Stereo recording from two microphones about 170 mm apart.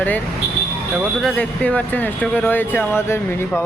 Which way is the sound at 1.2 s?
10° left (ahead or behind).